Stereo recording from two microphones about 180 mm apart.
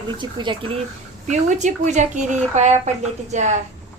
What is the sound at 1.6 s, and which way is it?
Speech, 40° right (ahead or behind).